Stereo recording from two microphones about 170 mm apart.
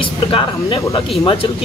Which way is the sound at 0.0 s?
30° left (ahead or behind).